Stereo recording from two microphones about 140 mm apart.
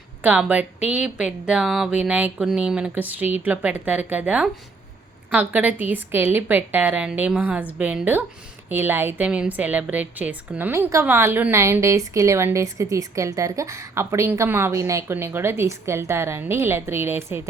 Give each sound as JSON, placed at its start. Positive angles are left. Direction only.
{"t": 0.2, "sound": "a woman's voice", "side_deg": -10}